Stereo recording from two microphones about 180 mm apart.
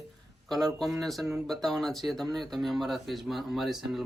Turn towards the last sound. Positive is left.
turn(degrees=0)  # may be behind; listen again after turning